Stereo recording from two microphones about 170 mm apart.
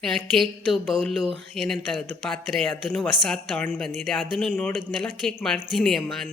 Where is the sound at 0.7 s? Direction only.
5° left (ahead or behind).